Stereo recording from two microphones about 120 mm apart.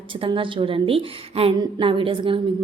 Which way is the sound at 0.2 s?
45° right (ahead or behind).